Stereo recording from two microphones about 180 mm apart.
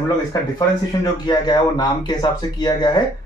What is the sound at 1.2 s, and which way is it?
Speech, 25° left (ahead or behind).